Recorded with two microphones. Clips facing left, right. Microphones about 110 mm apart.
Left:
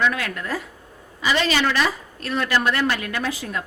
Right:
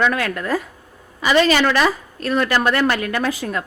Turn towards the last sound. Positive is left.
turn(degrees=-50)  # may be behind; listen again after turning